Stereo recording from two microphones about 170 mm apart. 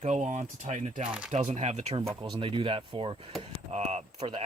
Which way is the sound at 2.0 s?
25° right (ahead or behind).